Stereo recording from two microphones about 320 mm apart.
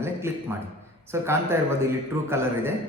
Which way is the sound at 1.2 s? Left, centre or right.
Centre.